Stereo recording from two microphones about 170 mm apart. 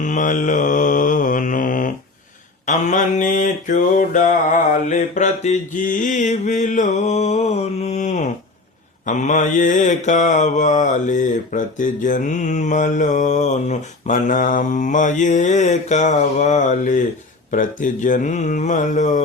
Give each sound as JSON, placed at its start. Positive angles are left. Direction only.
{"t": 0.0, "sound": "mantra", "side_deg": 50}